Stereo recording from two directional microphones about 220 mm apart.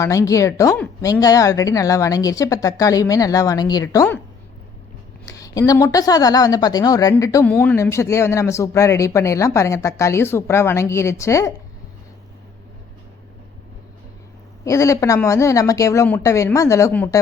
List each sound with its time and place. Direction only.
0.0 s a woman's voice: 15° left (ahead or behind)
5.2 s a woman's voice: 15° left (ahead or behind)
14.6 s a woman's voice: 15° left (ahead or behind)